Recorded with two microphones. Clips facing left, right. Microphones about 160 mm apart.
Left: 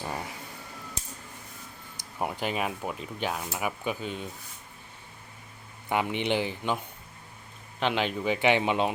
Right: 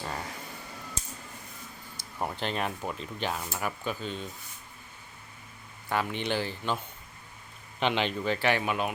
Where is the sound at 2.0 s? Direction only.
10° left (ahead or behind).